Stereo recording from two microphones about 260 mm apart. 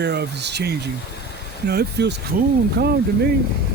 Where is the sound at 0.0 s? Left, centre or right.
Right.